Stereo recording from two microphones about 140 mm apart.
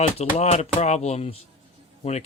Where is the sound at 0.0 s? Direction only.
45° left (ahead or behind).